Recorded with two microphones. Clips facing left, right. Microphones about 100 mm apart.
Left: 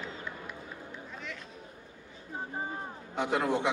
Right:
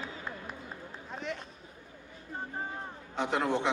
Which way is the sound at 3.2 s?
15° left (ahead or behind).